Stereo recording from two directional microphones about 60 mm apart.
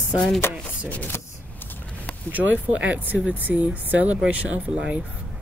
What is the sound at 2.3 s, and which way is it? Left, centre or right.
Speech, right.